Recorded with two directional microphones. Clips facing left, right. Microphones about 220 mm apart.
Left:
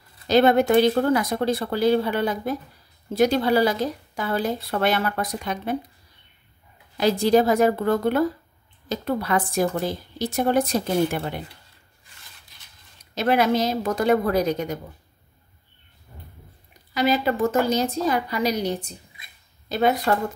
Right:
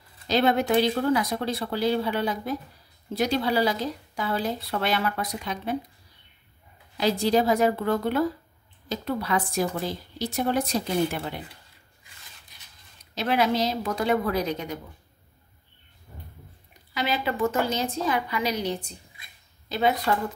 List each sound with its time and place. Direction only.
0.3 s a woman's voice: 50° left (ahead or behind)
7.0 s a woman's voice: 50° left (ahead or behind)
13.1 s a woman's voice: 50° left (ahead or behind)
16.9 s a woman's voice: 40° left (ahead or behind)
19.7 s a woman's voice: 50° left (ahead or behind)